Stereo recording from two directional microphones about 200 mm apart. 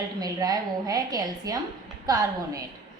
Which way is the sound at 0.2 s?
20° right (ahead or behind).